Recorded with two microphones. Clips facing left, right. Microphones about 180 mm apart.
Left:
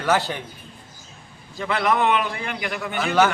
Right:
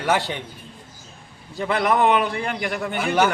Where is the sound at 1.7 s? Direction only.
40° right (ahead or behind).